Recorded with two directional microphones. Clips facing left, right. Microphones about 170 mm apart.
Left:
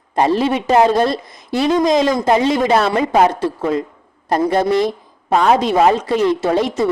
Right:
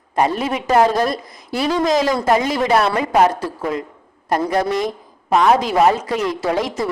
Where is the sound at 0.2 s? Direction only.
30° left (ahead or behind).